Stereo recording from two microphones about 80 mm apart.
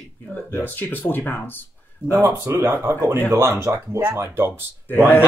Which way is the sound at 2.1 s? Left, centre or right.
Right.